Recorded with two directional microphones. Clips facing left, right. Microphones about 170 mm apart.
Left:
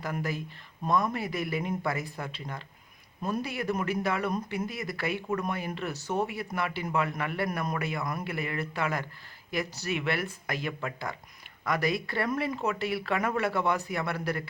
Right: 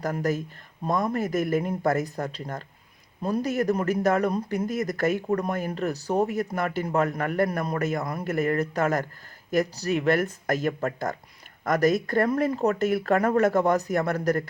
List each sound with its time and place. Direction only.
0.0 s speech: 45° right (ahead or behind)